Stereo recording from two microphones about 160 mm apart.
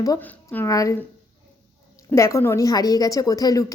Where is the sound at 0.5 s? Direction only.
20° left (ahead or behind).